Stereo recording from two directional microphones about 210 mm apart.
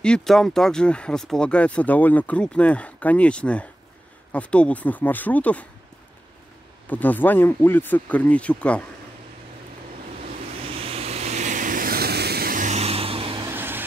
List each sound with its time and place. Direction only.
0.0 s speech: 5° left (ahead or behind)
6.9 s speech: 10° left (ahead or behind)
10.7 s vehicle: 25° right (ahead or behind)
13.5 s vehicle: 10° right (ahead or behind)